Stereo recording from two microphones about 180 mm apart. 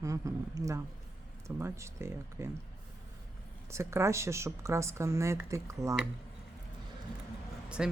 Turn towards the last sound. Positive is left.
turn(degrees=-5)  # may be behind; listen again after turning